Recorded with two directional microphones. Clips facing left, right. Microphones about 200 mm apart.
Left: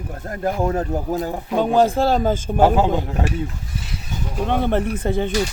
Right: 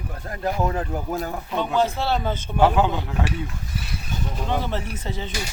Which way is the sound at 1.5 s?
45° left (ahead or behind).